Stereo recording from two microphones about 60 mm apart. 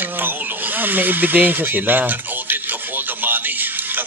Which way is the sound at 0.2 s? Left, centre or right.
Right.